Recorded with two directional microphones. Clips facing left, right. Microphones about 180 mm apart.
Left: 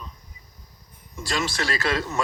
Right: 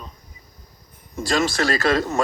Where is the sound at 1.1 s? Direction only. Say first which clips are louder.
Right 6 dB; 45° right (ahead or behind).